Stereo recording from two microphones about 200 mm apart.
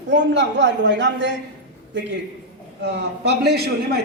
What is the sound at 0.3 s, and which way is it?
A man's voice, 60° right (ahead or behind).